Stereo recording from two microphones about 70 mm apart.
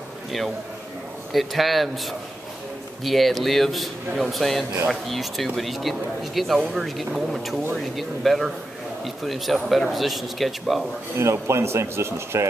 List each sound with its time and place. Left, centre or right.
1.3 s speech: centre
11.1 s speech: right